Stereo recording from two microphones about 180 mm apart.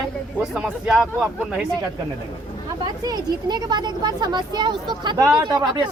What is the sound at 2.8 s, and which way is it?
Speech, 25° right (ahead or behind).